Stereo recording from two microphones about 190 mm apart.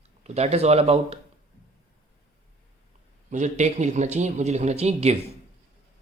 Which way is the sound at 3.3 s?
40° right (ahead or behind).